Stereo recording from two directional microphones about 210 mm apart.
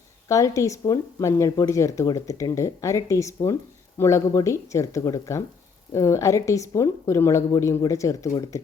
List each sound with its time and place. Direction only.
0.3 s speech: 15° left (ahead or behind)